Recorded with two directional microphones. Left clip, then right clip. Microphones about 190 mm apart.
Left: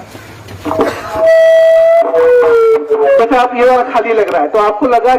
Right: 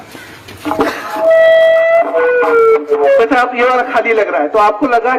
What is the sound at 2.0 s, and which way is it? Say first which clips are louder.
Speech: left 4 dB; 40° right (ahead or behind).